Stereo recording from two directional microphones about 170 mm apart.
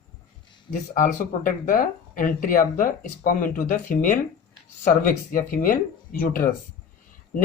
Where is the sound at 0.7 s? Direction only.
50° left (ahead or behind).